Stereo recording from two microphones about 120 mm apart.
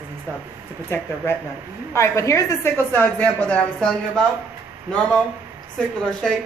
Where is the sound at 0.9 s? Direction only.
20° left (ahead or behind).